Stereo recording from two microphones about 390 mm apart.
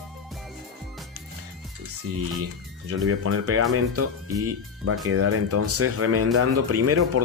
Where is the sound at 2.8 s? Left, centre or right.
Right.